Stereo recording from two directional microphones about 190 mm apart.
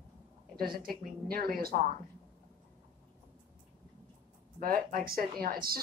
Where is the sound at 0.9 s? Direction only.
50° right (ahead or behind).